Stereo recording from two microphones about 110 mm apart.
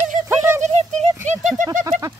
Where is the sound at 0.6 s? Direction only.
90° right.